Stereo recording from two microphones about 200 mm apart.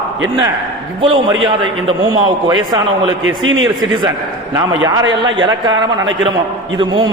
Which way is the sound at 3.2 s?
80° right.